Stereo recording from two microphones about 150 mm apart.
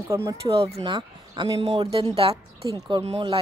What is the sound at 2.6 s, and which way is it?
Speech, 25° right (ahead or behind).